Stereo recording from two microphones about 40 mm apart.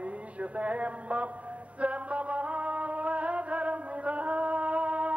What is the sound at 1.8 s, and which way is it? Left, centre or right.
Music, right.